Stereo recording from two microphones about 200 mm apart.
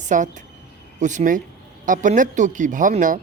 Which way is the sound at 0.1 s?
40° right (ahead or behind).